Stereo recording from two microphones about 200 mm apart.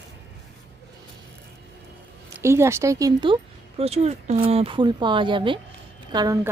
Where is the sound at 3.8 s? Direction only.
30° right (ahead or behind).